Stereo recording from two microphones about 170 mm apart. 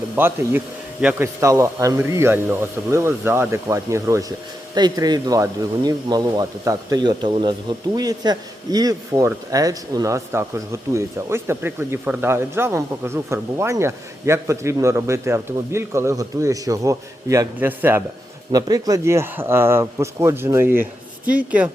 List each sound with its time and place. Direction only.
0.2 s a man's voice: 15° right (ahead or behind)